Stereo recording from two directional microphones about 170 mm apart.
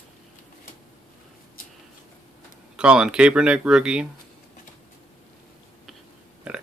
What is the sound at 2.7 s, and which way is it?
Speech, 5° right (ahead or behind).